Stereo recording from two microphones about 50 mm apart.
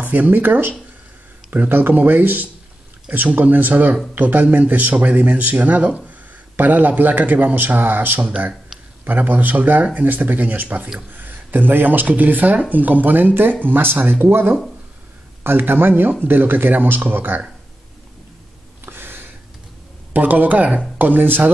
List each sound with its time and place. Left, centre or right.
0.0 s speech: right
18.9 s a sound: right
20.1 s speech: right